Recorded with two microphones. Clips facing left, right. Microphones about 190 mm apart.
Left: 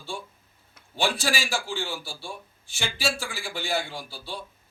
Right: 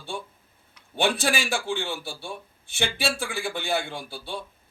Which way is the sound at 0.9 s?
60° right (ahead or behind).